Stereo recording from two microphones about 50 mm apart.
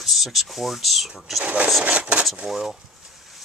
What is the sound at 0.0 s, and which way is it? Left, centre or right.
Speech, centre.